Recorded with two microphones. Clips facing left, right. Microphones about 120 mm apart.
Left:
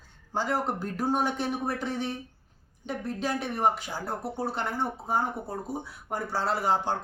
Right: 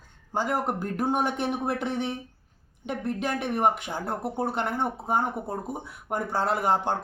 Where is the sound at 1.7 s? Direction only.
65° right (ahead or behind).